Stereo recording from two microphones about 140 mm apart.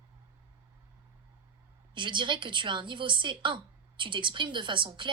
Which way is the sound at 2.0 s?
35° right (ahead or behind).